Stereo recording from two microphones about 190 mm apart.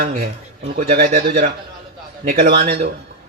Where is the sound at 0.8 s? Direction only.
45° right (ahead or behind).